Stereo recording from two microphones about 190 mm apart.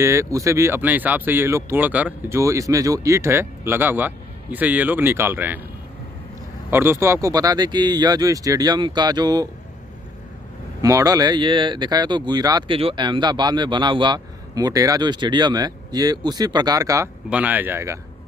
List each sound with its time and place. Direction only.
0.0 s speech: 15° right (ahead or behind)
6.7 s speech: 10° right (ahead or behind)
10.8 s speech: 20° right (ahead or behind)